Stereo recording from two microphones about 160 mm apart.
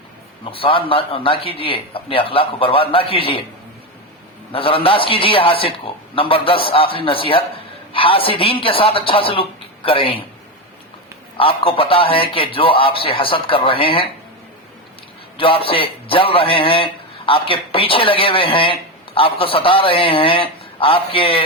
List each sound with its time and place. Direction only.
0.5 s a man's voice: 35° left (ahead or behind)
4.5 s a man's voice: 35° left (ahead or behind)
11.3 s a man's voice: 35° left (ahead or behind)
15.4 s a man's voice: 35° left (ahead or behind)